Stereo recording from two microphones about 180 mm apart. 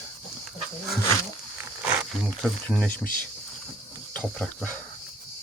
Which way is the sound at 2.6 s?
5° left (ahead or behind).